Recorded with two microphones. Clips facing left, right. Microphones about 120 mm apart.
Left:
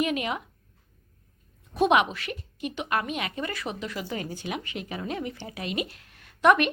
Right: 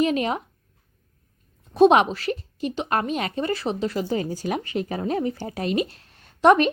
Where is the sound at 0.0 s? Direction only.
35° right (ahead or behind).